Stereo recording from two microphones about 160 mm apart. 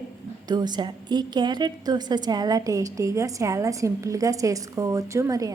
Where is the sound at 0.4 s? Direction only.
25° right (ahead or behind).